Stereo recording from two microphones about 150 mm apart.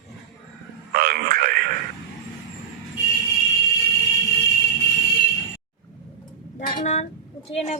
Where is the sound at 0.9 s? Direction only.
75° right (ahead or behind).